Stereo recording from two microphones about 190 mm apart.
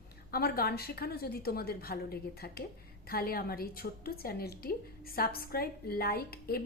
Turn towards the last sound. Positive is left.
turn(degrees=55)  # may be behind; listen again after turning